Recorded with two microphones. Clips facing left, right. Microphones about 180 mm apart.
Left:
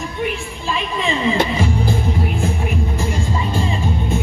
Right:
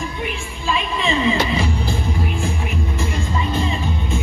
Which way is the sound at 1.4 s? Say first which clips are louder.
Left 2 dB; 45° left (ahead or behind).